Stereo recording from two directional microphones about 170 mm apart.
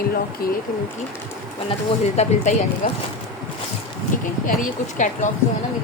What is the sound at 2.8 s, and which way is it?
Speech, 45° left (ahead or behind).